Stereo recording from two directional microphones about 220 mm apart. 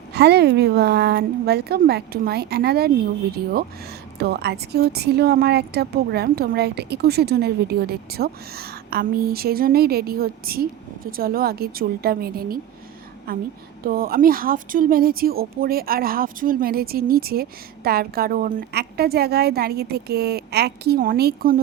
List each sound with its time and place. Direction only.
0.1 s a woman's voice: 50° right (ahead or behind)
4.2 s a woman's voice: 50° right (ahead or behind)